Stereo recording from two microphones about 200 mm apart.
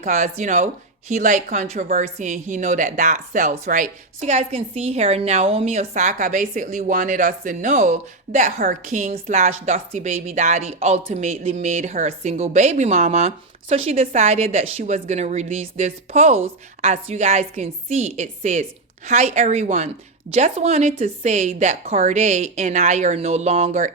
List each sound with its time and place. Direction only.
0.0 s speech: 40° right (ahead or behind)